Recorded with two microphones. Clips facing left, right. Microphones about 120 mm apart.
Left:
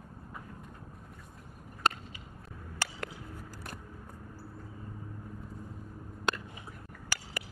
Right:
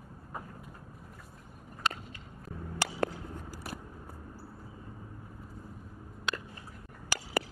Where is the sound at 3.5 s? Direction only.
5° right (ahead or behind).